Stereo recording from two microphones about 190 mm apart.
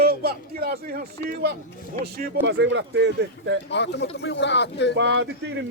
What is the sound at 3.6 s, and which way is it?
Speech, 65° left (ahead or behind).